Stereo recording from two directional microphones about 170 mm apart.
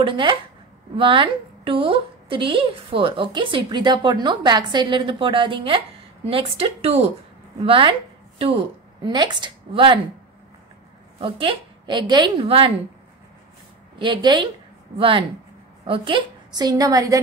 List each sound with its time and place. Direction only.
0.0 s a woman's voice: 30° right (ahead or behind)
11.1 s a woman's voice: 30° right (ahead or behind)
13.9 s a woman's voice: 30° right (ahead or behind)